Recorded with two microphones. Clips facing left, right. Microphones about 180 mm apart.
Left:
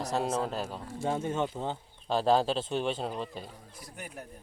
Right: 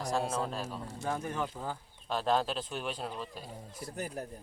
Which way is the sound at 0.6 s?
25° left (ahead or behind).